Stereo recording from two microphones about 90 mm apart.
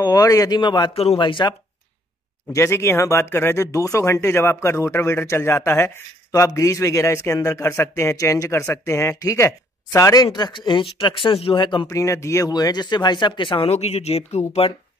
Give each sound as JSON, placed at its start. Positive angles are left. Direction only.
{"t": 0.0, "sound": "speech", "side_deg": 45}
{"t": 0.6, "sound": "speech", "side_deg": 60}
{"t": 2.5, "sound": "a man's voice", "side_deg": 30}
{"t": 11.9, "sound": "speech", "side_deg": 35}